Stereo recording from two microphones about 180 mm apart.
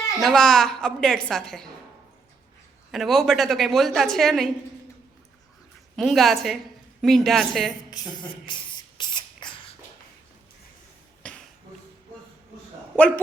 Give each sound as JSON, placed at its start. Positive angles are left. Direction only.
{"t": 0.2, "sound": "a woman's voice", "side_deg": 0}
{"t": 2.9, "sound": "a woman's voice", "side_deg": 0}
{"t": 6.0, "sound": "a woman's voice", "side_deg": 0}
{"t": 7.9, "sound": "spray", "side_deg": 25}
{"t": 11.2, "sound": "finger snapping", "side_deg": 5}